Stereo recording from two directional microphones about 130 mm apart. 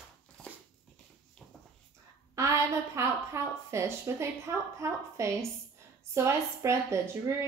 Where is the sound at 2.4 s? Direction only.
20° right (ahead or behind).